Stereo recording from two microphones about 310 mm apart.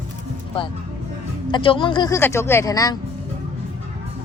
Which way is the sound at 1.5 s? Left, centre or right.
Centre.